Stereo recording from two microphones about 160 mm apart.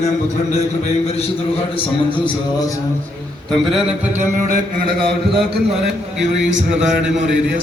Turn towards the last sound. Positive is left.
turn(degrees=-5)  # may be behind; listen again after turning